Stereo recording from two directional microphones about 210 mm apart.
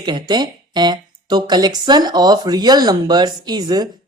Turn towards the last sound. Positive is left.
turn(degrees=-20)  # may be behind; listen again after turning